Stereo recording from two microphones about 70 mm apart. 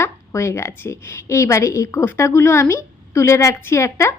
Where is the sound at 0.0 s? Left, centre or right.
Left.